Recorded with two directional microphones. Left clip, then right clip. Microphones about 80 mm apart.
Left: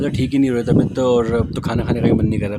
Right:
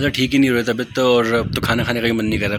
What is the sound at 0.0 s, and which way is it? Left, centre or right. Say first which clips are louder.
Speech: right 2 dB; left.